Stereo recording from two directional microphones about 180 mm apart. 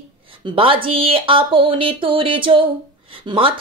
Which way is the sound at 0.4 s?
25° right (ahead or behind).